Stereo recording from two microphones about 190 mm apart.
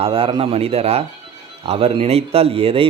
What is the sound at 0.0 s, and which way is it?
A man's voice, 30° right (ahead or behind).